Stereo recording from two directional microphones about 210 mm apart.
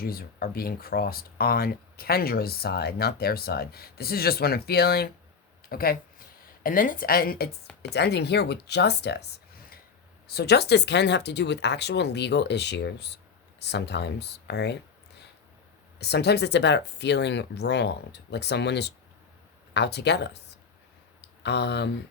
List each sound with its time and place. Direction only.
0.0 s speech: 45° left (ahead or behind)
10.2 s speech: 50° left (ahead or behind)
16.0 s speech: 50° left (ahead or behind)
21.2 s a sound: 55° left (ahead or behind)